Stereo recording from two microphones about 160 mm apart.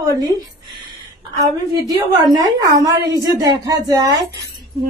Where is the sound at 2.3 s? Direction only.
25° right (ahead or behind).